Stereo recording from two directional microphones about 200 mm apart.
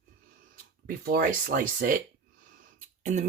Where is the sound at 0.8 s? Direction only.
50° right (ahead or behind).